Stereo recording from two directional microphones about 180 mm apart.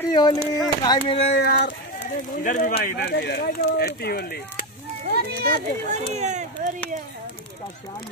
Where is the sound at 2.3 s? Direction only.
50° left (ahead or behind).